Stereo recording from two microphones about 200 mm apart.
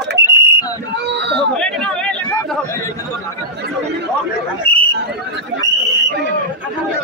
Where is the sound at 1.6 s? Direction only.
5° left (ahead or behind).